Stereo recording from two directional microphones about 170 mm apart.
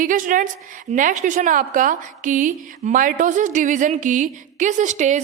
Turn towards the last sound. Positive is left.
turn(degrees=-45)  # may be behind; listen again after turning